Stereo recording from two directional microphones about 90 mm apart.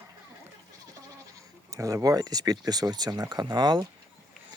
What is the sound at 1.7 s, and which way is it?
Speech, 40° right (ahead or behind).